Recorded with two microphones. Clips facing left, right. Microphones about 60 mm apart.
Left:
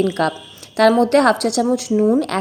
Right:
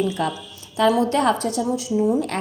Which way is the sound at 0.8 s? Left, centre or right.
Left.